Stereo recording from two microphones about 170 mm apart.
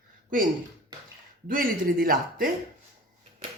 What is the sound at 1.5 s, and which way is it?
Speech, 55° right (ahead or behind).